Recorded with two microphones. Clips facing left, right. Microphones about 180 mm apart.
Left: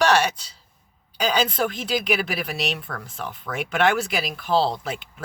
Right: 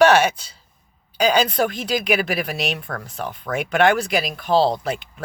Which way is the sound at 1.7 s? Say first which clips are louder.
Right 3 dB; centre (ahead or behind).